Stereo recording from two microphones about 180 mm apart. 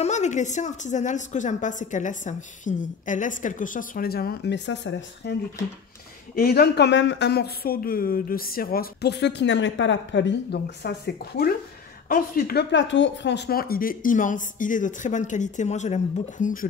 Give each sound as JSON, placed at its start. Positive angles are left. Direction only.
{"t": 0.0, "sound": "a woman's voice", "side_deg": 40}
{"t": 6.3, "sound": "speech", "side_deg": 60}
{"t": 12.7, "sound": "a woman's voice", "side_deg": 90}